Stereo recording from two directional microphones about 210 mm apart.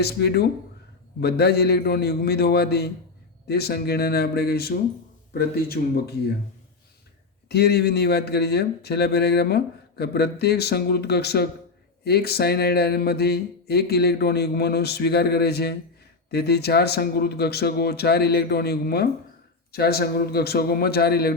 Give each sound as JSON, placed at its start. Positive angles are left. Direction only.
{"t": 0.0, "sound": "speech", "side_deg": 50}
{"t": 7.4, "sound": "speech", "side_deg": 50}